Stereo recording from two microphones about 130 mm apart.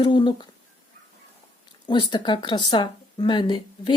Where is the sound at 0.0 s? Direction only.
35° left (ahead or behind).